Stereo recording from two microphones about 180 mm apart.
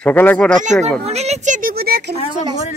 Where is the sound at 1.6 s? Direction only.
55° right (ahead or behind).